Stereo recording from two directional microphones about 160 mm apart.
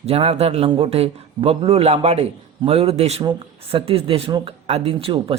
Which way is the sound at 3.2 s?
30° right (ahead or behind).